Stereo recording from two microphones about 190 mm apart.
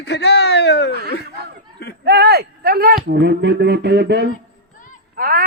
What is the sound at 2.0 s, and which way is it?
Speech, 60° right (ahead or behind).